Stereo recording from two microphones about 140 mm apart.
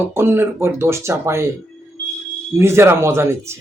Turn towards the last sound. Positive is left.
turn(degrees=-20)  # may be behind; listen again after turning